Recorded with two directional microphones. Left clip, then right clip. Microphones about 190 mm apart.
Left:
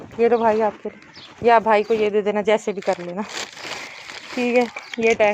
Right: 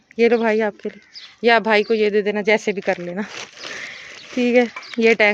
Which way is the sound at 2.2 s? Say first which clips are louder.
Even; 20° right (ahead or behind).